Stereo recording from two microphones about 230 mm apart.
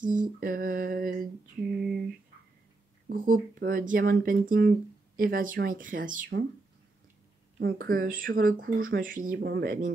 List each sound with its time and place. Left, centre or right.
0.0 s speech: right
3.1 s speech: right
7.5 s speech: right